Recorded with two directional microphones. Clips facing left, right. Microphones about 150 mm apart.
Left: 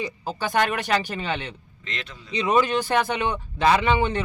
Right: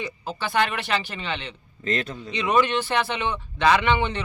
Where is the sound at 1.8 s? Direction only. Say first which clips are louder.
Right 10 dB; 40° right (ahead or behind).